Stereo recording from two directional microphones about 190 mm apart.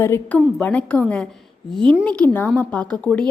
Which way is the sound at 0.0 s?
10° left (ahead or behind).